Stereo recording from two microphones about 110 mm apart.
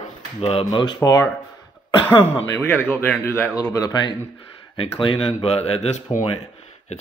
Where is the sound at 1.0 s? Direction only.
30° left (ahead or behind).